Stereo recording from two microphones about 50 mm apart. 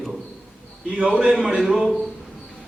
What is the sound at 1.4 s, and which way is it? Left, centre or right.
Speech, centre.